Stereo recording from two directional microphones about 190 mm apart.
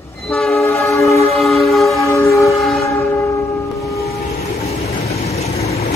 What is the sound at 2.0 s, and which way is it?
Train, 15° left (ahead or behind).